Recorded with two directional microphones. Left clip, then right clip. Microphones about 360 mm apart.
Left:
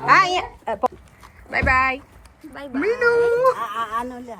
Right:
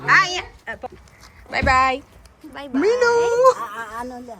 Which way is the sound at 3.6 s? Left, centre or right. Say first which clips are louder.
Left 4 dB; centre.